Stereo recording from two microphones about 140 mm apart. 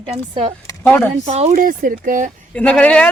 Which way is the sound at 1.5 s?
80° right.